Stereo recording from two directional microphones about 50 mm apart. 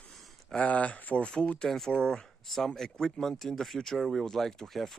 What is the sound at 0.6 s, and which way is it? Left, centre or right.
Speech, left.